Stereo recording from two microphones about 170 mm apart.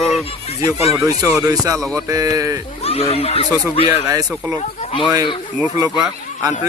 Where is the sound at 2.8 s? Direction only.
35° left (ahead or behind).